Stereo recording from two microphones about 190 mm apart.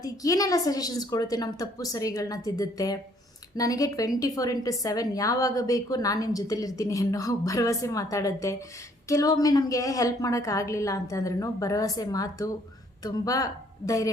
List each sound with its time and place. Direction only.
0.0 s a woman's voice: 20° left (ahead or behind)